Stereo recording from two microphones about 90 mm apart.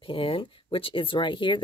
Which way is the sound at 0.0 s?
80° left.